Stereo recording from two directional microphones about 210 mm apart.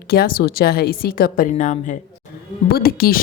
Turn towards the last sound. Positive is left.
turn(degrees=45)  # may be behind; listen again after turning